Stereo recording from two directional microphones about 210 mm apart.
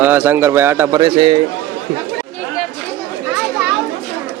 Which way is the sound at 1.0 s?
25° right (ahead or behind).